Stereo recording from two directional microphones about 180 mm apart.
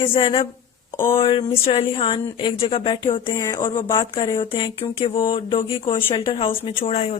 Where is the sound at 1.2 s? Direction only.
30° left (ahead or behind).